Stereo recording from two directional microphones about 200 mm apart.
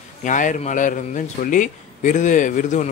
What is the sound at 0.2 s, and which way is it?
Speech, 40° left (ahead or behind).